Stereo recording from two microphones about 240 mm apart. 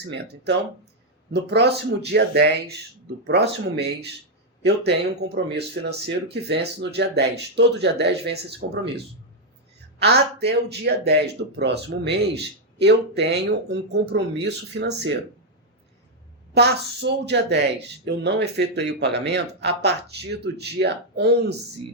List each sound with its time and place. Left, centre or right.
1.3 s speech: right
10.0 s speech: right
16.6 s speech: right